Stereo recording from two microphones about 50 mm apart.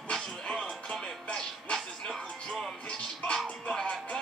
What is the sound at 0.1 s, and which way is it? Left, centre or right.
Music, centre.